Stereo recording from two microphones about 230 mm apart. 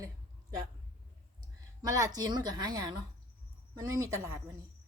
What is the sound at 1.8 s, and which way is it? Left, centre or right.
Speech, centre.